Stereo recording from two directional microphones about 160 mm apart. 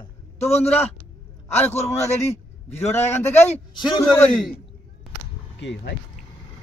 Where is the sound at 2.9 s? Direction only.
15° left (ahead or behind).